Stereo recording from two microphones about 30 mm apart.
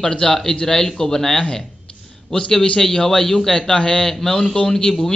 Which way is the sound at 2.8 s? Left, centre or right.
Centre.